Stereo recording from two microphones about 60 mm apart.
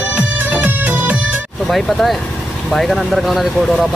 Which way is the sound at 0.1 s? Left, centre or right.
Right.